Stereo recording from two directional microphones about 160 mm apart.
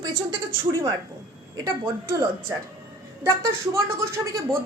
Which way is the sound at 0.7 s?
20° right (ahead or behind).